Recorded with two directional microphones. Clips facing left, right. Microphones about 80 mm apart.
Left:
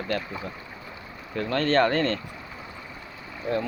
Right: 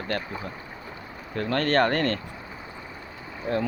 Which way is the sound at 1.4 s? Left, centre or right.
Right.